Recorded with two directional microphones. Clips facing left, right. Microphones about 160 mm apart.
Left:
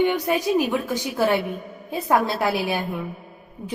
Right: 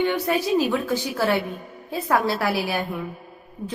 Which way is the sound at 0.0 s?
15° left (ahead or behind).